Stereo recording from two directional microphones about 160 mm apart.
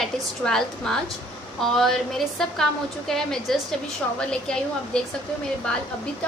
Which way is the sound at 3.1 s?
Centre (ahead or behind).